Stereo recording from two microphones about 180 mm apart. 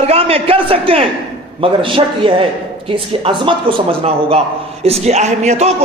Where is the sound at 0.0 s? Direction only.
35° right (ahead or behind).